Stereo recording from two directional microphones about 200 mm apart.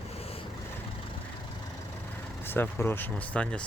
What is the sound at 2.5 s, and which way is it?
Speech, 10° left (ahead or behind).